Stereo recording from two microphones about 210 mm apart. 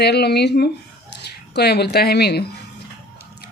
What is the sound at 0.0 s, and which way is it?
Speech, 50° left (ahead or behind).